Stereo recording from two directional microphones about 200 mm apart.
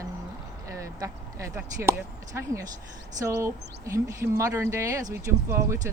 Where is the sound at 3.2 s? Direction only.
15° right (ahead or behind).